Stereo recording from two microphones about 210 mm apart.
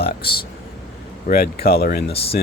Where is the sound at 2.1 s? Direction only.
25° left (ahead or behind).